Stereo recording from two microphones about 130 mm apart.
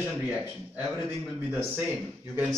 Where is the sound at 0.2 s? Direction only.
15° right (ahead or behind).